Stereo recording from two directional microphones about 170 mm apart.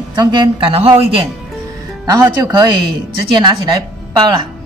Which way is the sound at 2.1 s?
20° right (ahead or behind).